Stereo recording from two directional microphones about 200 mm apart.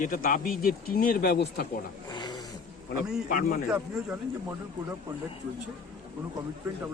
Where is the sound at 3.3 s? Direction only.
40° left (ahead or behind).